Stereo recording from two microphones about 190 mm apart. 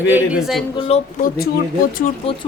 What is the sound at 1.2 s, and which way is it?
Speech, 50° left (ahead or behind).